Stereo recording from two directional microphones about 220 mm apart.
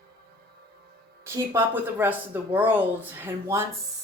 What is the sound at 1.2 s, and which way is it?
A woman's voice, 10° right (ahead or behind).